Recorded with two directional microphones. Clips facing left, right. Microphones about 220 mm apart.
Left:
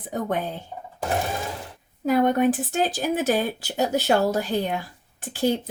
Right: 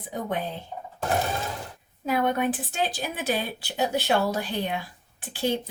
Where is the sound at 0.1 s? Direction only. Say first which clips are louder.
Left 3 dB; 45° left (ahead or behind).